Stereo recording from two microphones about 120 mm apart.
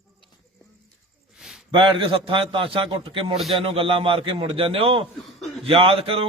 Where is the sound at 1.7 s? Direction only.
45° right (ahead or behind).